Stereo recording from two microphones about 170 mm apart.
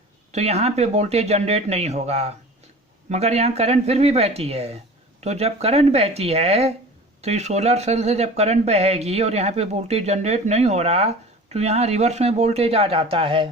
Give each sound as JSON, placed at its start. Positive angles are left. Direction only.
{"t": 0.3, "sound": "speech", "side_deg": -40}